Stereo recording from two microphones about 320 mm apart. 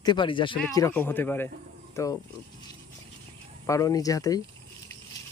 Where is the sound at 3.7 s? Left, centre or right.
Centre.